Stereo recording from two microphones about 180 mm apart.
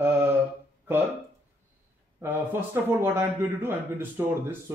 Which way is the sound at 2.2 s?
10° right (ahead or behind).